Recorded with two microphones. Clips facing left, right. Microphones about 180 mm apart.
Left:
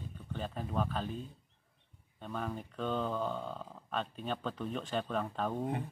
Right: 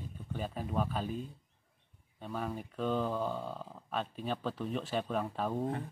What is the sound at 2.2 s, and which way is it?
Speech, 5° right (ahead or behind).